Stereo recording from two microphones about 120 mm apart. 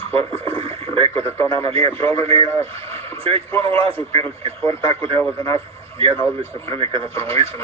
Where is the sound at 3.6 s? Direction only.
50° right (ahead or behind).